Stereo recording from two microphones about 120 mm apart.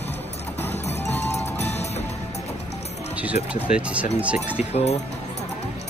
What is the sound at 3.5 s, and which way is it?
Speech, 10° right (ahead or behind).